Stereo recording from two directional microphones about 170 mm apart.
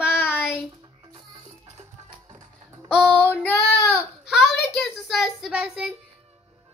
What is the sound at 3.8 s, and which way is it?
Baby cry, 15° left (ahead or behind).